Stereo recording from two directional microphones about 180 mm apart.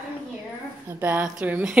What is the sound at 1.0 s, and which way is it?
Speech, 10° right (ahead or behind).